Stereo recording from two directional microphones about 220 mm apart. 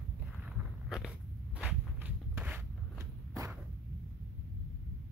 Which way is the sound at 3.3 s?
15° right (ahead or behind).